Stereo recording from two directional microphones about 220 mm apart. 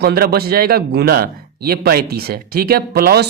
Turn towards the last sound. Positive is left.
turn(degrees=-45)  # may be behind; listen again after turning